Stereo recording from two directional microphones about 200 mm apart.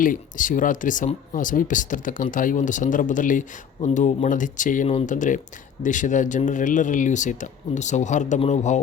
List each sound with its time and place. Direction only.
0.0 s speech: 40° left (ahead or behind)